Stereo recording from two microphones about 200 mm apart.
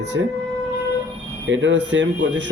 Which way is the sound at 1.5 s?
65° right (ahead or behind).